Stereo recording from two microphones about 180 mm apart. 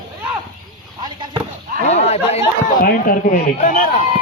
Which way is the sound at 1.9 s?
35° left (ahead or behind).